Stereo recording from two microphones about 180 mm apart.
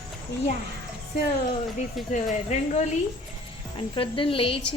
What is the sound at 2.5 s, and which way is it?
Speech, 40° left (ahead or behind).